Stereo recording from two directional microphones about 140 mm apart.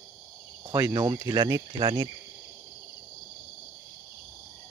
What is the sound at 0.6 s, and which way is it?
Speech, 25° right (ahead or behind).